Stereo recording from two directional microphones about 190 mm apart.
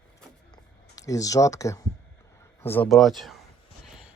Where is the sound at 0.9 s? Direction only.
15° left (ahead or behind).